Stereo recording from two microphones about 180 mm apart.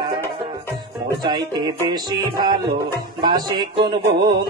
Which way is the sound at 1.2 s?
25° right (ahead or behind).